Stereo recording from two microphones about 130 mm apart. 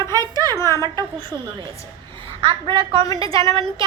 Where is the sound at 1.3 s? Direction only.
25° right (ahead or behind).